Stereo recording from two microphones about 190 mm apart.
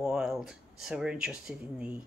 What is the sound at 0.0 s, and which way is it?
Speech, centre (ahead or behind).